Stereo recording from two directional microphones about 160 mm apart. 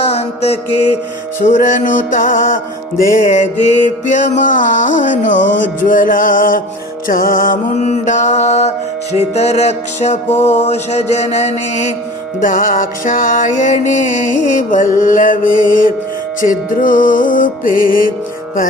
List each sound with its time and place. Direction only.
1.6 s music: 55° left (ahead or behind)